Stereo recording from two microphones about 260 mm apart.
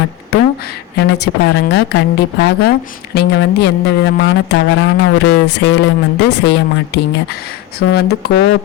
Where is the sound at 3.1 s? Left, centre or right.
Left.